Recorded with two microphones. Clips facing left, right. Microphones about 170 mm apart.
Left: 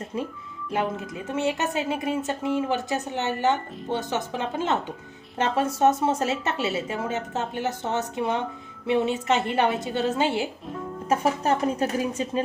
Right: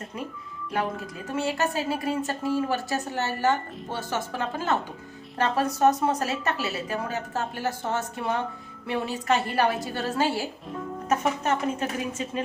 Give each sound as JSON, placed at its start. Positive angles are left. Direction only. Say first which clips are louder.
{"t": 0.7, "sound": "a woman's voice", "louder": "left 2 dB", "side_deg": 20}
{"t": 11.1, "sound": "speech", "louder": "left 2 dB", "side_deg": 35}